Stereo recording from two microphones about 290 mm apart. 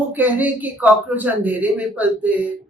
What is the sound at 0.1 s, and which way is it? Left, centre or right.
Speech, centre.